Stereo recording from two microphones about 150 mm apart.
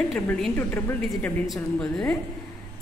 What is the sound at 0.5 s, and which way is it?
A woman's voice, 15° left (ahead or behind).